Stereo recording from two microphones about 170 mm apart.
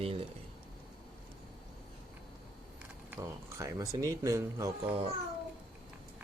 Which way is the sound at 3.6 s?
20° right (ahead or behind).